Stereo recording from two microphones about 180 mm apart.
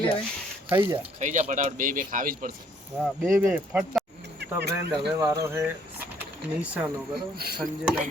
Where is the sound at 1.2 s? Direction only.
45° right (ahead or behind).